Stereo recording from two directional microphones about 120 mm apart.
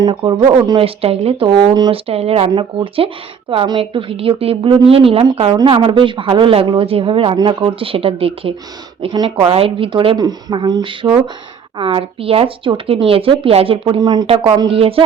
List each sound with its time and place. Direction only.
0.0 s speech: 40° right (ahead or behind)
1.9 s speech: 55° right (ahead or behind)
2.5 s speech: 45° right (ahead or behind)
9.0 s speech: 40° right (ahead or behind)
9.5 s speech: 55° right (ahead or behind); by 14.3 s 35° right (ahead or behind)
14.3 s speech: 55° right (ahead or behind)